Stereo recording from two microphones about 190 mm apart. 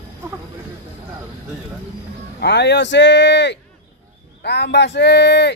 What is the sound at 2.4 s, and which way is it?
Speech, 60° left (ahead or behind).